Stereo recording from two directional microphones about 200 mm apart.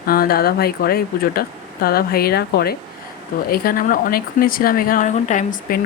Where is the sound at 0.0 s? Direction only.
45° left (ahead or behind).